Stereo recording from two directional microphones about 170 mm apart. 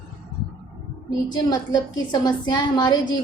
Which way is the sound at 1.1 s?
25° left (ahead or behind).